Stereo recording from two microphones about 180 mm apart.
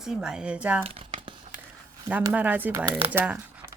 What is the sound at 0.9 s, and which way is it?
Crumpling, 30° right (ahead or behind).